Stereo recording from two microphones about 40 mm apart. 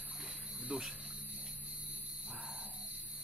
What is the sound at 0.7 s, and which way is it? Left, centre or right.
Speech, right.